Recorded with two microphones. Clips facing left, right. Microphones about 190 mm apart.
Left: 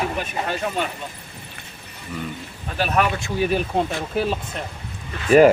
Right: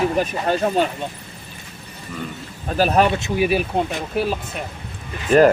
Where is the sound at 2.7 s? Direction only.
35° right (ahead or behind).